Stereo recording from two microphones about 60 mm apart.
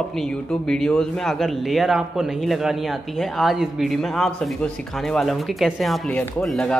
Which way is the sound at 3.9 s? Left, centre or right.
Centre.